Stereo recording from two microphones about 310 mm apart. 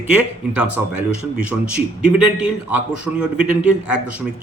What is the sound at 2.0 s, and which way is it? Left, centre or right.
A man's voice, centre.